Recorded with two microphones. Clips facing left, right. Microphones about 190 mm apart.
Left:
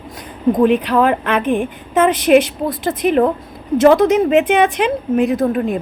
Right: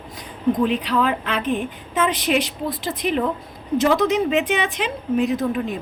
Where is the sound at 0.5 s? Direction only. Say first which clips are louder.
Left 10 dB; 55° left (ahead or behind).